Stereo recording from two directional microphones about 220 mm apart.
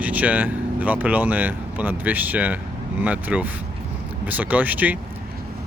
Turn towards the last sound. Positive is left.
turn(degrees=-5)  # may be behind; listen again after turning